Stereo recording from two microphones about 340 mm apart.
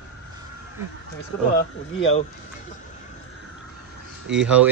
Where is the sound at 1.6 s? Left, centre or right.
Left.